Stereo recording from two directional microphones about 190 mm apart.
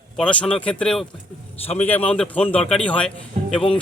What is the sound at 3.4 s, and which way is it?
Music, 35° right (ahead or behind).